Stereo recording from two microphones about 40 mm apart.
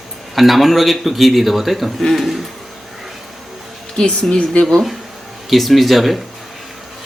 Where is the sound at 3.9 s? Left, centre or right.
Left.